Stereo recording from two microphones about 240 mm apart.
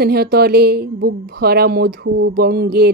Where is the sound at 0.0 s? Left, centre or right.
Right.